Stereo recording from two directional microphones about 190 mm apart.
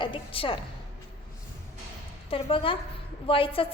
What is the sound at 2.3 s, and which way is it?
A woman's voice, 30° left (ahead or behind).